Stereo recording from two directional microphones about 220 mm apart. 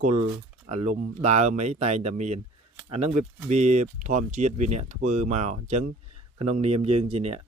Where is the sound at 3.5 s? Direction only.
30° right (ahead or behind).